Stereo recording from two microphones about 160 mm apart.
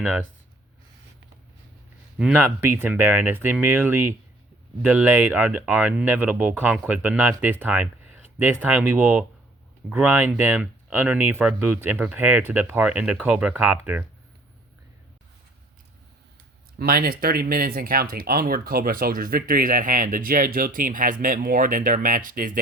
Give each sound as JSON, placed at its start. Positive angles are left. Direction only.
{"t": 2.1, "sound": "speech", "side_deg": -10}
{"t": 16.7, "sound": "speech", "side_deg": -65}